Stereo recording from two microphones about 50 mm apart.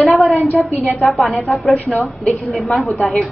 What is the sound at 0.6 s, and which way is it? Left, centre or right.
A woman's voice, centre.